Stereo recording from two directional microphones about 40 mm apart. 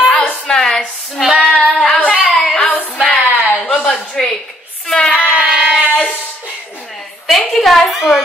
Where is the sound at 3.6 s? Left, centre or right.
Left.